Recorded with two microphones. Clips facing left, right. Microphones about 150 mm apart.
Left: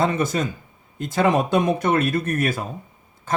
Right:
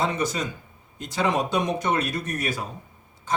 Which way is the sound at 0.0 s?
50° left (ahead or behind).